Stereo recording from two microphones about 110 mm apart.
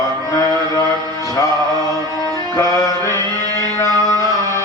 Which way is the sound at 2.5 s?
30° left (ahead or behind).